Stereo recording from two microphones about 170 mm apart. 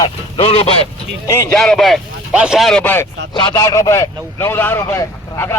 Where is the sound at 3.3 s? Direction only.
25° left (ahead or behind).